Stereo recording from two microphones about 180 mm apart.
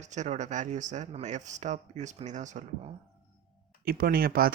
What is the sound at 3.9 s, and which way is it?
Speech, 55° right (ahead or behind).